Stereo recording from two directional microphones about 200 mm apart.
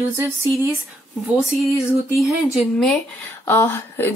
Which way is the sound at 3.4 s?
10° left (ahead or behind).